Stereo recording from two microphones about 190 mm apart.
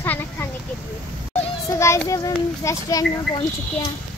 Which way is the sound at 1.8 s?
15° left (ahead or behind).